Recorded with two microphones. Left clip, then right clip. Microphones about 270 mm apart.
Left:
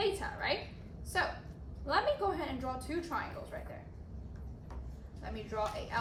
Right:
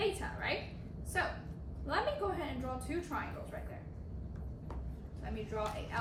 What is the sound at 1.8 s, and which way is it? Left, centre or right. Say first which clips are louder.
A woman's voice: left 4 dB; left.